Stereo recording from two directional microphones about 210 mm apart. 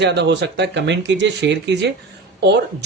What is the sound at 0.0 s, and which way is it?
Speech, 55° right (ahead or behind).